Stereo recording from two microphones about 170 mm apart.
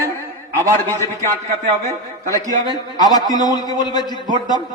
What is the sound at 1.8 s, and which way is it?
A man's voice, 20° left (ahead or behind).